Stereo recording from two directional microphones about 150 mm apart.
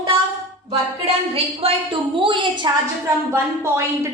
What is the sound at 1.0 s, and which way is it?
A woman's voice, 40° right (ahead or behind).